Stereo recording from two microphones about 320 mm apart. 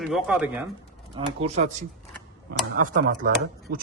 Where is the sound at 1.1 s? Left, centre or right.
Centre.